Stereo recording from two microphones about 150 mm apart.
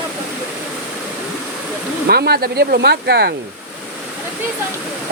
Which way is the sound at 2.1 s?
90° right.